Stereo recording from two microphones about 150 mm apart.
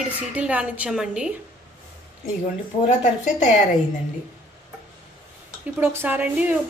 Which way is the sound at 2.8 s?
50° left (ahead or behind).